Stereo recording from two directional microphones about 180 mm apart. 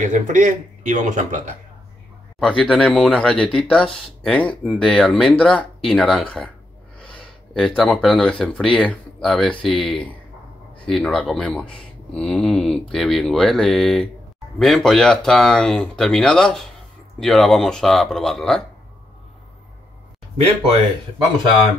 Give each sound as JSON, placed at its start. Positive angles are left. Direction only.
{"t": 0.0, "sound": "speech", "side_deg": -45}
{"t": 2.4, "sound": "speech", "side_deg": 5}
{"t": 7.5, "sound": "speech", "side_deg": 5}